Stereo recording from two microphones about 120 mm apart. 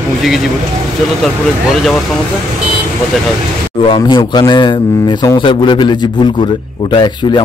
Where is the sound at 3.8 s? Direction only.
45° left (ahead or behind).